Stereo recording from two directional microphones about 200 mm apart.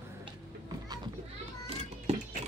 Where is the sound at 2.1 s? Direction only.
30° right (ahead or behind).